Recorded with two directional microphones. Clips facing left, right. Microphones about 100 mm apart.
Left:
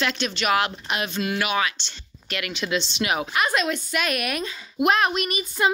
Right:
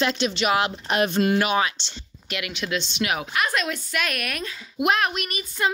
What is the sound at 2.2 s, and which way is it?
Speech, 10° right (ahead or behind).